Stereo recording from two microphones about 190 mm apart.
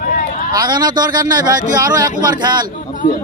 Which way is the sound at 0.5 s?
20° right (ahead or behind).